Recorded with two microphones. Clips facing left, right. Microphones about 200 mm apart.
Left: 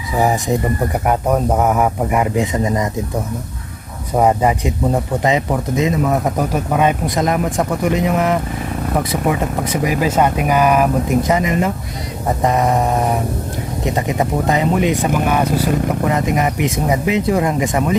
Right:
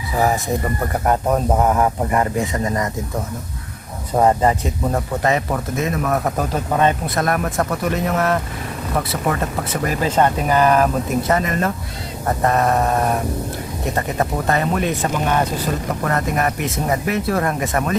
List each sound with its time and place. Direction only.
1.0 s speech: 5° left (ahead or behind)
4.2 s speech: 10° left (ahead or behind)